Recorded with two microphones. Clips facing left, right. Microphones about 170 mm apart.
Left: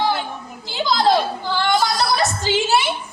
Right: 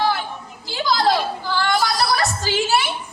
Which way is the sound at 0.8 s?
20° left (ahead or behind).